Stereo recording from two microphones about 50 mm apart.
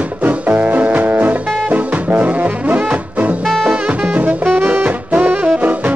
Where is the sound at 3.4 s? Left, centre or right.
Centre.